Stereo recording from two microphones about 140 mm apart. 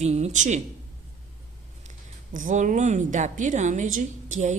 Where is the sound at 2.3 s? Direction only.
65° right (ahead or behind).